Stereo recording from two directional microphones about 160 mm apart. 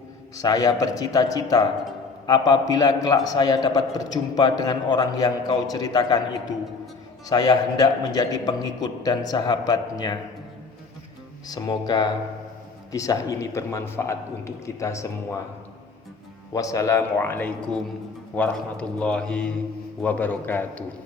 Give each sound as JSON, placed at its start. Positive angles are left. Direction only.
{"t": 0.3, "sound": "a man's voice", "side_deg": 25}
{"t": 11.4, "sound": "a man's voice", "side_deg": 25}
{"t": 16.5, "sound": "a man's voice", "side_deg": 20}